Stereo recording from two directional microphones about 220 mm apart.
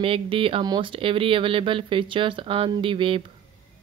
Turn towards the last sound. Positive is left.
turn(degrees=-25)  # may be behind; listen again after turning